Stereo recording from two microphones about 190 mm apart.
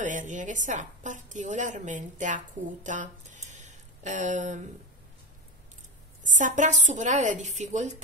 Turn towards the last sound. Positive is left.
turn(degrees=-40)  # may be behind; listen again after turning